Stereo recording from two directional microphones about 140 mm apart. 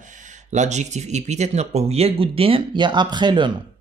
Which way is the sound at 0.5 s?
55° right (ahead or behind).